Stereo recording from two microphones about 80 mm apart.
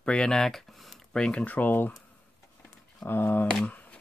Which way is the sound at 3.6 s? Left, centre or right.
Centre.